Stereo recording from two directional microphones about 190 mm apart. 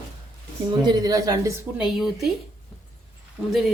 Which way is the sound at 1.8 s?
Centre (ahead or behind).